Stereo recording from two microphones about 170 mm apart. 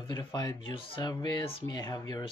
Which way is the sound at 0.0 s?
25° left (ahead or behind).